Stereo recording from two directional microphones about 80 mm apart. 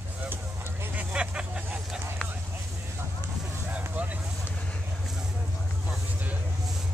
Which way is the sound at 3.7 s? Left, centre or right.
Centre.